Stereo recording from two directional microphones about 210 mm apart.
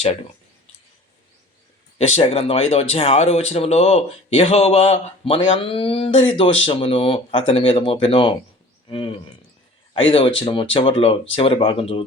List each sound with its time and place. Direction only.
2.0 s speech: 30° left (ahead or behind)